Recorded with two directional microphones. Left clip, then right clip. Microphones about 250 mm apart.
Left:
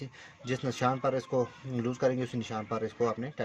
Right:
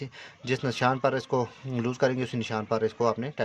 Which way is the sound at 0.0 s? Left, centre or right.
Right.